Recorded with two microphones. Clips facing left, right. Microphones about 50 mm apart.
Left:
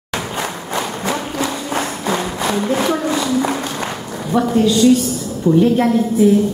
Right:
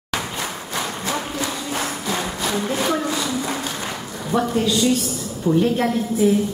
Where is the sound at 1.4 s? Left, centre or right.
Left.